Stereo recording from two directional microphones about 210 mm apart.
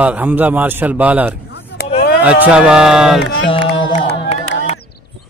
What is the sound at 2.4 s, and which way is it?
Speech, 5° right (ahead or behind).